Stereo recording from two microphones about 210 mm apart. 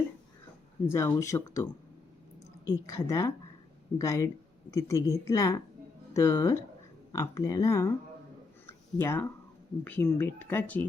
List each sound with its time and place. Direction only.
0.9 s speech: 15° left (ahead or behind)
2.6 s speech: 15° left (ahead or behind)
9.0 s speech: 10° left (ahead or behind)